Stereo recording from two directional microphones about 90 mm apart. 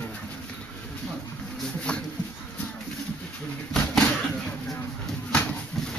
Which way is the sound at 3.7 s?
5° left (ahead or behind).